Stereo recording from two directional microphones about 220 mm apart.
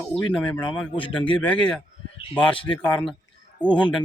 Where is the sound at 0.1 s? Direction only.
5° left (ahead or behind).